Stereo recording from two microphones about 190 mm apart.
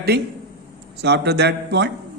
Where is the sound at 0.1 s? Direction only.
60° right (ahead or behind).